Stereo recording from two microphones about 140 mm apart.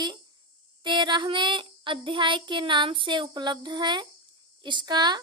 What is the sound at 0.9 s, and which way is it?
Child singing, 35° right (ahead or behind).